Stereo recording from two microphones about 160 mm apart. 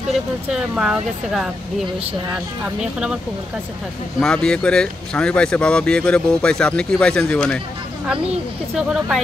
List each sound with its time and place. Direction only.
0.1 s speech: 5° right (ahead or behind)
4.2 s speech: 5° left (ahead or behind)
8.7 s speech: 5° right (ahead or behind)